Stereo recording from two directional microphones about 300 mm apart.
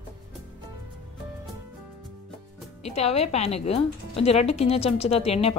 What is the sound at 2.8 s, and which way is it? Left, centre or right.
A woman's voice, left.